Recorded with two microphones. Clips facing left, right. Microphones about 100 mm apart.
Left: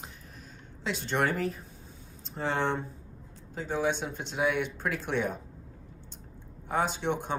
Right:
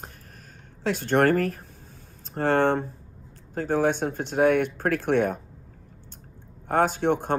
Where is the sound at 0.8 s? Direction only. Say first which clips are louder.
Right 8 dB; 50° right (ahead or behind).